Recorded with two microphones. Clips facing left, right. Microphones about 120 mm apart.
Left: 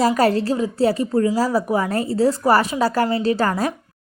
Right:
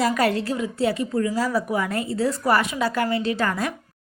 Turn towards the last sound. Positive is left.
turn(degrees=35)  # may be behind; listen again after turning